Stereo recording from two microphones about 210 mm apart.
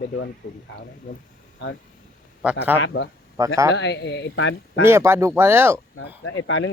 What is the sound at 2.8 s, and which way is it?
Speech, 60° left (ahead or behind).